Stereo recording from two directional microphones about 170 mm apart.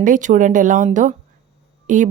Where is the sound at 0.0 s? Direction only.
50° right (ahead or behind).